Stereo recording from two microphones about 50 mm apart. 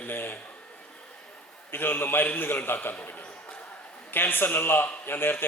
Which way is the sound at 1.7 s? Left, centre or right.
Left.